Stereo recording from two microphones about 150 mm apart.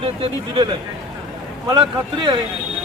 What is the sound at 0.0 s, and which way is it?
A man's voice, 35° right (ahead or behind).